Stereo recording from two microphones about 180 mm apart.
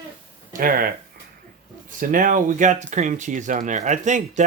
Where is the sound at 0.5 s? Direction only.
50° right (ahead or behind).